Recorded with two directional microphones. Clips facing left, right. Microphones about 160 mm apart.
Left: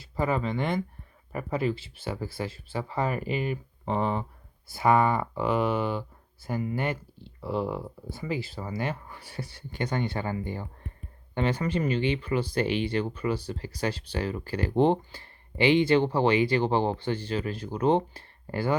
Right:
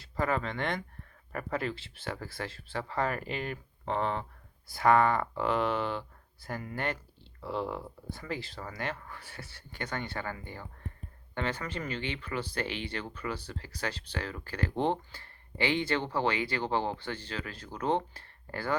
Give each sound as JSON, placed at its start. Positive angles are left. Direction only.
{"t": 0.2, "sound": "speech", "side_deg": 10}